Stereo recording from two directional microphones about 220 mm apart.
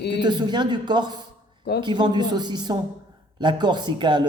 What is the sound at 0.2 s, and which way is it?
Speech, 20° right (ahead or behind).